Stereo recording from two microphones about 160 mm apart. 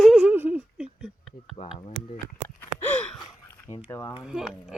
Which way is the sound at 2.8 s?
10° left (ahead or behind).